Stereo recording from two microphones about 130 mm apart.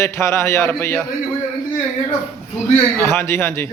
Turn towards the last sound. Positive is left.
turn(degrees=20)  # may be behind; listen again after turning